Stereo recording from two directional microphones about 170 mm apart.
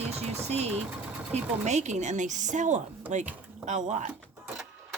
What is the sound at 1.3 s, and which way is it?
Speech, 45° right (ahead or behind).